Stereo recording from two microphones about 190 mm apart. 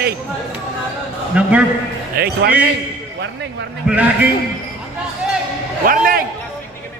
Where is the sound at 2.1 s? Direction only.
60° right (ahead or behind).